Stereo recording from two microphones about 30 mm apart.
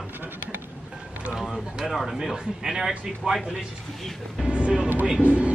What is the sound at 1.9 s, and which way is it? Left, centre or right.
Speech, centre.